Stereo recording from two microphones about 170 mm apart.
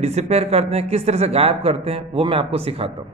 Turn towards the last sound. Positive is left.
turn(degrees=-35)  # may be behind; listen again after turning